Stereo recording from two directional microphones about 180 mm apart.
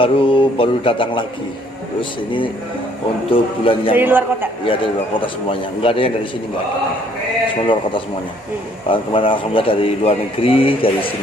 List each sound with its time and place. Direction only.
0.0 s a man's voice: 30° left (ahead or behind)
3.9 s a man's voice: 10° right (ahead or behind)
4.6 s a man's voice: 30° left (ahead or behind)
8.9 s a man's voice: 30° left (ahead or behind)